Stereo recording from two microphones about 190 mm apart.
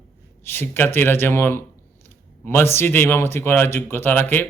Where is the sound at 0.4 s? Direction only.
10° left (ahead or behind).